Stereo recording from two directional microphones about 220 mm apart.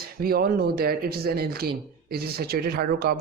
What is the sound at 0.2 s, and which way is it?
Speech, 45° right (ahead or behind).